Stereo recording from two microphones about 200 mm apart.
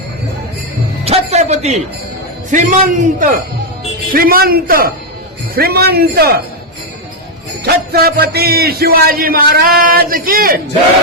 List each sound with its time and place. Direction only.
1.0 s a sound: 30° right (ahead or behind)
2.5 s a man's voice: 40° right (ahead or behind)
7.6 s a man's voice: 50° right (ahead or behind)